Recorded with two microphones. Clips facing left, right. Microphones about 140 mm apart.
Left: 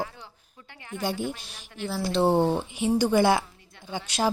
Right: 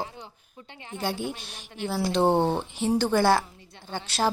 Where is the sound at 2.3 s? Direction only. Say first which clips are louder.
Left 1 dB; 20° right (ahead or behind).